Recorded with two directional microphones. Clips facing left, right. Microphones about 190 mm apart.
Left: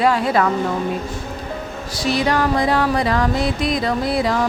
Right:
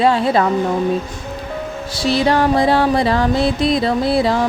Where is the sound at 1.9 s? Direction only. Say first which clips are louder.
Right 3 dB; 30° right (ahead or behind).